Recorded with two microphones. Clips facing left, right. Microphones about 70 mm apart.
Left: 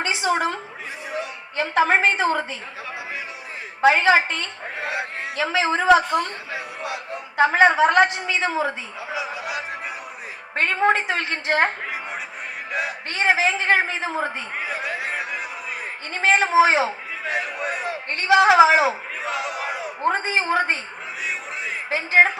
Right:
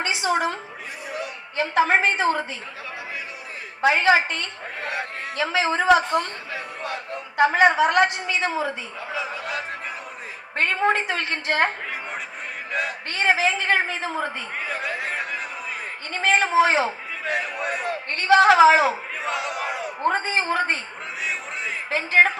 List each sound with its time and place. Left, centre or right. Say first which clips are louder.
0.1 s a sound: left 1 dB; left
3.8 s a woman's voice: left 2 dB; left
4.8 s a man's voice: left 2 dB; centre
9.1 s a woman's voice: left 1 dB; centre
10.5 s a woman's voice: left 2 dB; left
13.1 s a man's voice: left 1 dB; left
14.6 s a sound: even; centre
16.2 s a man's voice: left 2 dB; left
17.2 s speech: even; centre
18.3 s a woman's voice: even; centre
19.2 s crowd: even; centre
20.0 s a man's voice: left 1 dB; centre
21.8 s speech: left 1 dB; centre